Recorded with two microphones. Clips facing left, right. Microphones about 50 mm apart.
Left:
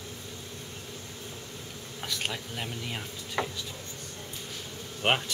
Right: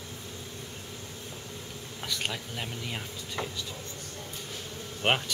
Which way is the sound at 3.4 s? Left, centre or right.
Left.